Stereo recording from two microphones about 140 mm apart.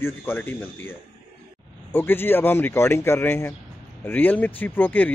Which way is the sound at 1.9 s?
15° left (ahead or behind).